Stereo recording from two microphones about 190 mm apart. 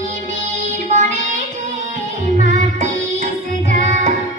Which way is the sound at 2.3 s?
40° right (ahead or behind).